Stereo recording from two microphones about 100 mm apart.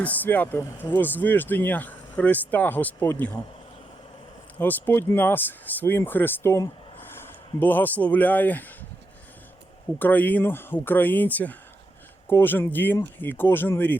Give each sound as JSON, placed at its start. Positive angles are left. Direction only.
{"t": 0.0, "sound": "speech", "side_deg": 15}
{"t": 4.5, "sound": "speech", "side_deg": 20}
{"t": 10.0, "sound": "speech", "side_deg": 15}